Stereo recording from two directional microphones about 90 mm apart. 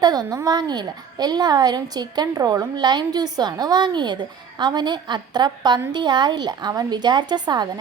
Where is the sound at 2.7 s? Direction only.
55° right (ahead or behind).